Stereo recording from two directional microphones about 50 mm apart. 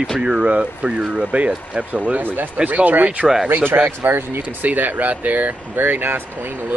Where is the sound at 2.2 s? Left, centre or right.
Right.